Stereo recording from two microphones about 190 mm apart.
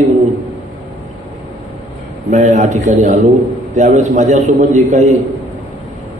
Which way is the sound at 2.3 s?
40° right (ahead or behind).